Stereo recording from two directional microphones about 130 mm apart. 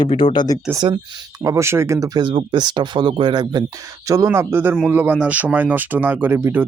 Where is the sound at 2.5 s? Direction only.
35° right (ahead or behind).